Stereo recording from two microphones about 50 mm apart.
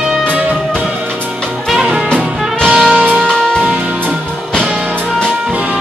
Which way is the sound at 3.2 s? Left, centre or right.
Centre.